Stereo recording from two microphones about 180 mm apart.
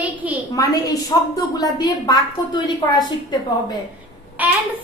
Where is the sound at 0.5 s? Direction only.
20° left (ahead or behind).